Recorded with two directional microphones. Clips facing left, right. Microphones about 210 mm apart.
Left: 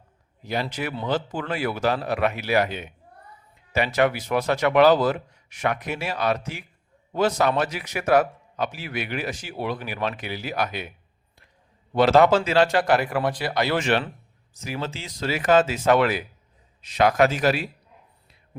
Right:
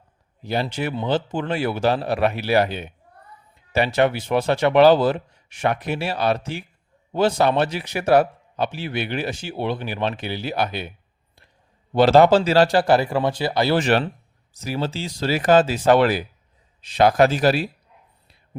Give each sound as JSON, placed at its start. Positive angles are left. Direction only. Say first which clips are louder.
{"t": 0.4, "sound": "a man's voice", "louder": "right 3 dB", "side_deg": -30}
{"t": 11.9, "sound": "speech", "louder": "right 3 dB", "side_deg": -30}